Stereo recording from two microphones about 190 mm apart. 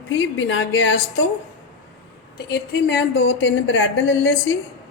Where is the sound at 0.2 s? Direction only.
85° left.